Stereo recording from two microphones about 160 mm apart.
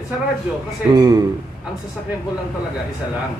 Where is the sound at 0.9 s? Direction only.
25° right (ahead or behind).